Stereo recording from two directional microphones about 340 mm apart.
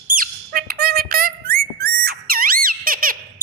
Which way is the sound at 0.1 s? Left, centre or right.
Right.